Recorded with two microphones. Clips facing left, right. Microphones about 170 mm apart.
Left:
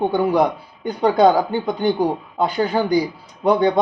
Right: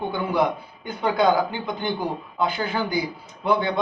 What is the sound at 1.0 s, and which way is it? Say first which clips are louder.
Speech: left 5 dB; 40° left (ahead or behind).